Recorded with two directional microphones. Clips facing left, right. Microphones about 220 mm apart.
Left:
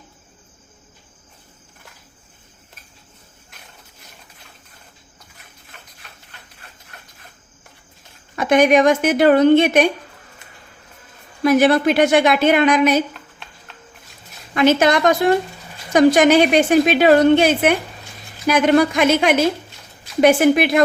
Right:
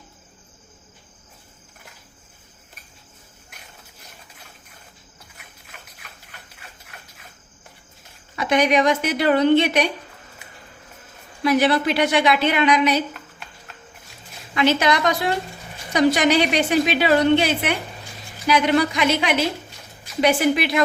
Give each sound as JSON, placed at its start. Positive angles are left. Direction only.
{"t": 8.4, "sound": "a woman's voice", "side_deg": 50}
{"t": 11.4, "sound": "a woman's voice", "side_deg": 50}
{"t": 14.5, "sound": "a woman's voice", "side_deg": 50}